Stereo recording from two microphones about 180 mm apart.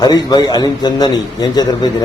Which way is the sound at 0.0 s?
20° left (ahead or behind).